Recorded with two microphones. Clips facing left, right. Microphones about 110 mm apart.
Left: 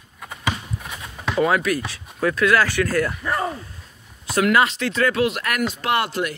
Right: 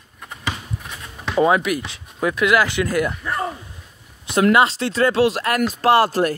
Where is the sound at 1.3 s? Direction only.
20° right (ahead or behind).